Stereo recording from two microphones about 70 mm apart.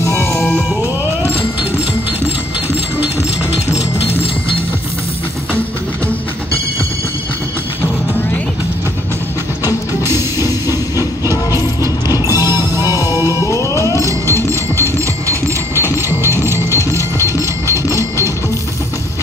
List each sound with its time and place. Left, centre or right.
0.0 s music: left
10.7 s train: right
13.1 s music: right
13.5 s music: left
15.2 s a sound: right
15.8 s music: left
16.4 s music: right
17.8 s a sound: left